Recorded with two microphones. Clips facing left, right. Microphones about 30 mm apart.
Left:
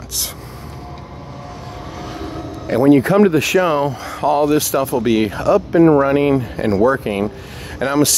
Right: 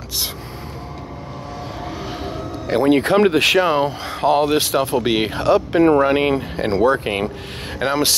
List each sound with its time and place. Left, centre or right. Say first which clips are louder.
2.8 s speech: left 3 dB; right
3.6 s speech: left 1 dB; right
6.5 s speech: left 2 dB; right
7.8 s speech: left 3 dB; right